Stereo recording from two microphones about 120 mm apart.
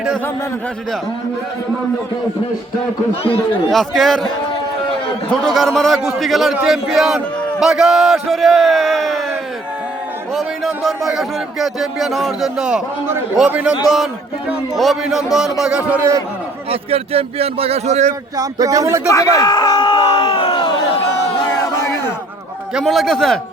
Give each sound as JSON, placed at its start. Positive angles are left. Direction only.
{"t": 3.2, "sound": "speech", "side_deg": 50}
{"t": 3.7, "sound": "speech", "side_deg": 0}
{"t": 5.3, "sound": "speech", "side_deg": 0}
{"t": 10.3, "sound": "a man's voice", "side_deg": 0}
{"t": 16.6, "sound": "a man's voice", "side_deg": -55}
{"t": 18.3, "sound": "speech", "side_deg": -30}
{"t": 19.1, "sound": "a sound", "side_deg": 30}
{"t": 22.7, "sound": "speech", "side_deg": 0}